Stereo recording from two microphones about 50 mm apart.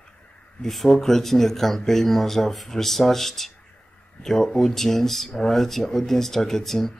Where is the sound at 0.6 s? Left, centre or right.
Centre.